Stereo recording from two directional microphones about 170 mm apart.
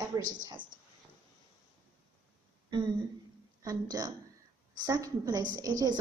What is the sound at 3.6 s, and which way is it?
A woman's voice, 20° right (ahead or behind).